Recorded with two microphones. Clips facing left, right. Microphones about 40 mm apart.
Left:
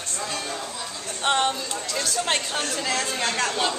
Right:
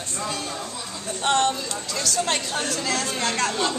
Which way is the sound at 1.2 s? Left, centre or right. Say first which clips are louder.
Right 1 dB; centre.